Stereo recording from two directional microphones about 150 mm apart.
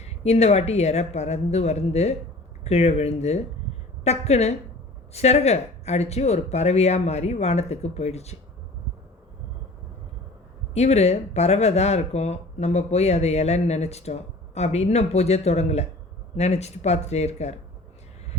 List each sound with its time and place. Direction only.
0.0 s speech: 45° left (ahead or behind)
10.8 s speech: 45° left (ahead or behind)